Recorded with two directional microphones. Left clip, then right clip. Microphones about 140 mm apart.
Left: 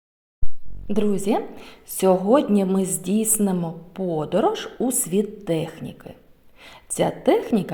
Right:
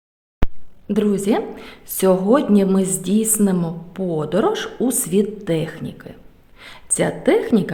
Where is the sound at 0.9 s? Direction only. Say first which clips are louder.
Right 3 dB; 10° left (ahead or behind).